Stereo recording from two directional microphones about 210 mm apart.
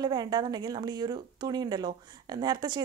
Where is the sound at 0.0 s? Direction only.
20° right (ahead or behind).